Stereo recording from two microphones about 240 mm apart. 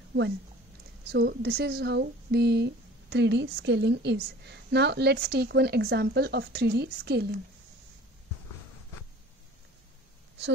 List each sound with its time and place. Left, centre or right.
1.0 s speech: right